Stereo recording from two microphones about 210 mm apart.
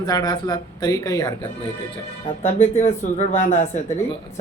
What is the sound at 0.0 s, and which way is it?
Speech, 20° left (ahead or behind).